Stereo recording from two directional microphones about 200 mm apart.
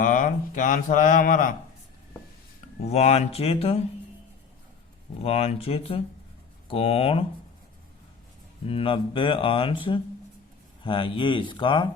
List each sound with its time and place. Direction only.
0.0 s speech: 40° left (ahead or behind)
2.8 s speech: 35° left (ahead or behind)
5.2 s speech: 30° left (ahead or behind)
8.6 s speech: 30° left (ahead or behind)